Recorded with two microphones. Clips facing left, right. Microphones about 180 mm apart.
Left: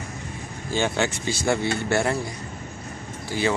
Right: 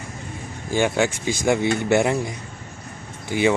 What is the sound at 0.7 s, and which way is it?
Speech, 10° right (ahead or behind).